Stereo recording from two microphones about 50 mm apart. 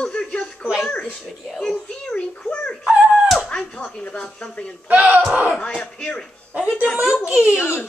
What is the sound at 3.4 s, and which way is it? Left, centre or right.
Speech, centre.